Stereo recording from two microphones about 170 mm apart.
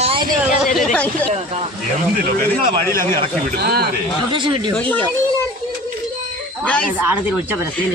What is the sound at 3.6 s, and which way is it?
Speech, 65° right (ahead or behind).